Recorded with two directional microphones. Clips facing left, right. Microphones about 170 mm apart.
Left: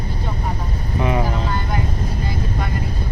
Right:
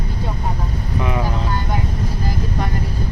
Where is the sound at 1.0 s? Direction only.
30° left (ahead or behind).